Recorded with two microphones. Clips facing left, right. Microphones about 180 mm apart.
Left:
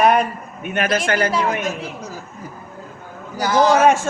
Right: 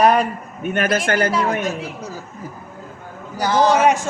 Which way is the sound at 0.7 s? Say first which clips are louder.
Right 1 dB; 45° right (ahead or behind).